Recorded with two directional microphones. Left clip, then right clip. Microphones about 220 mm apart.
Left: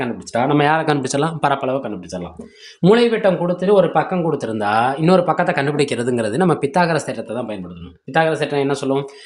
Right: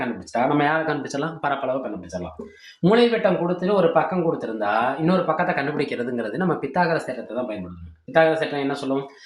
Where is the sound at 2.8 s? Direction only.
45° left (ahead or behind).